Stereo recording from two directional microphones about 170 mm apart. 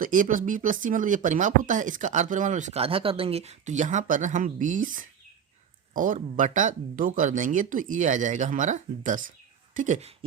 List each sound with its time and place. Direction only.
0.0 s speech: 50° right (ahead or behind)